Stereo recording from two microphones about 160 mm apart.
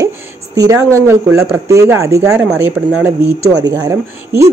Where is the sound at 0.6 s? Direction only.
20° right (ahead or behind).